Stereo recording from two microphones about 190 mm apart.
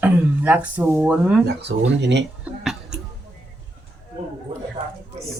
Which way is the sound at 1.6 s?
65° right (ahead or behind).